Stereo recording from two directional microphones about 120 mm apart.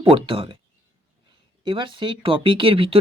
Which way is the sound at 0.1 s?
45° right (ahead or behind).